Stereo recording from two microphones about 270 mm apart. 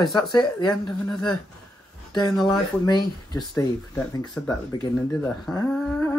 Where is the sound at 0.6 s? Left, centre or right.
Centre.